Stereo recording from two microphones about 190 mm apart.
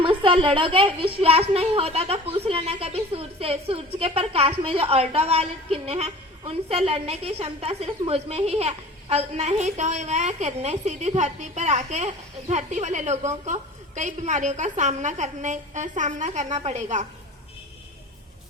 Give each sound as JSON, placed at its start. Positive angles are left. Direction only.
{"t": 0.0, "sound": "a woman's voice", "side_deg": -30}